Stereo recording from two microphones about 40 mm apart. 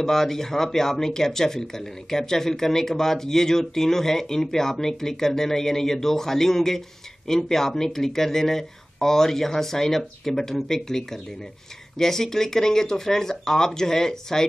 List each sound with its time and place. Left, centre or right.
0.0 s speech: centre